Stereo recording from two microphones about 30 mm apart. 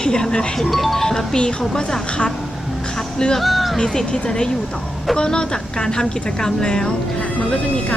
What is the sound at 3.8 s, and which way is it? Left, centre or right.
A woman's voice, left.